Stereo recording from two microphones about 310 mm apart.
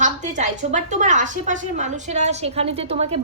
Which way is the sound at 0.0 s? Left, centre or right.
Right.